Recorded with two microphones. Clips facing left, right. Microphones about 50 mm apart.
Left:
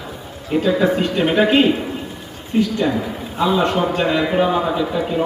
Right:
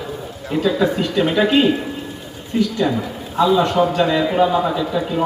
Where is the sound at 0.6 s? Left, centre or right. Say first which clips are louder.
Left 1 dB; left.